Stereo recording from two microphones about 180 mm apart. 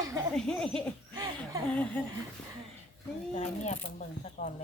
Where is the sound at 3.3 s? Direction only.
40° left (ahead or behind).